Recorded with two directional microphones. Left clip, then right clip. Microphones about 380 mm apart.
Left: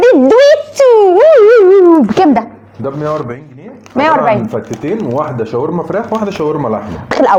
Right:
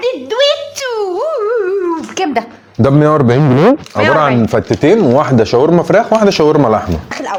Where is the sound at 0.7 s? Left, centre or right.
Left.